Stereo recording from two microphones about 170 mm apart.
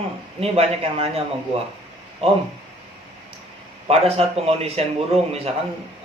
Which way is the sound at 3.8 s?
35° right (ahead or behind).